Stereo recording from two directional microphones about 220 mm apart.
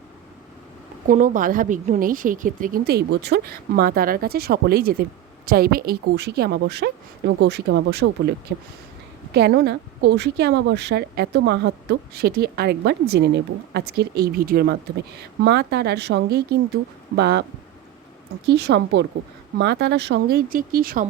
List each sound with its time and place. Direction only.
1.0 s a woman's voice: 35° right (ahead or behind)
18.4 s a woman's voice: 50° right (ahead or behind)